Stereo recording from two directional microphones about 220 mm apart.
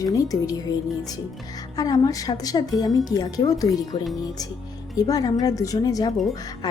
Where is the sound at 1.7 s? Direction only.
15° left (ahead or behind).